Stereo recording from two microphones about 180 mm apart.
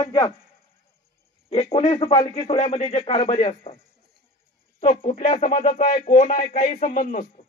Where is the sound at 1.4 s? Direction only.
35° left (ahead or behind).